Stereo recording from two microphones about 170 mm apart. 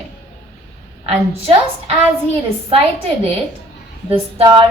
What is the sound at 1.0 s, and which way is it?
Speech, 35° right (ahead or behind).